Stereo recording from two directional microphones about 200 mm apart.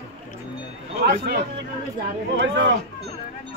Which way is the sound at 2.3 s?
60° right (ahead or behind).